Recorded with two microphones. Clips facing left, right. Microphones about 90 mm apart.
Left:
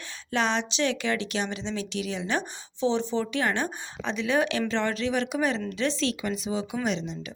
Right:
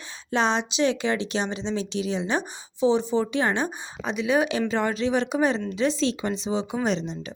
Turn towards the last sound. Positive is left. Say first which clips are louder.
# right 3 dB
turn(degrees=-35)  # may be behind; listen again after turning